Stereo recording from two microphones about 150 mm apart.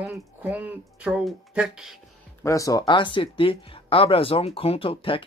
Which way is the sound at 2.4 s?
20° left (ahead or behind).